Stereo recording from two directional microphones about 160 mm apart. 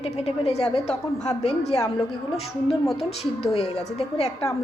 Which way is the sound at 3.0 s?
40° left (ahead or behind).